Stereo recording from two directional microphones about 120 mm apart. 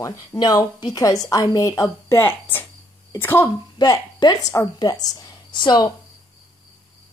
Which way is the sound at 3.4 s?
35° left (ahead or behind).